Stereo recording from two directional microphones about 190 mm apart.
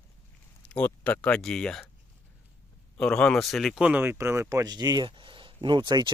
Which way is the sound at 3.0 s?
5° left (ahead or behind).